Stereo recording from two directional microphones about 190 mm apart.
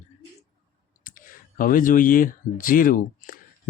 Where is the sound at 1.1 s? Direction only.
45° left (ahead or behind).